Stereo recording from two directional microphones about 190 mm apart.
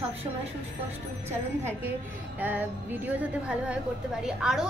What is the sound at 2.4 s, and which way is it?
A woman's voice, 10° right (ahead or behind).